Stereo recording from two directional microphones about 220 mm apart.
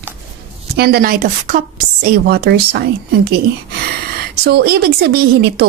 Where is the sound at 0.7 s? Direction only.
45° right (ahead or behind).